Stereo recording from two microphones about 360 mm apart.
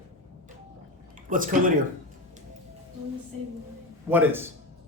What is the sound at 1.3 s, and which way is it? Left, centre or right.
Speech, right.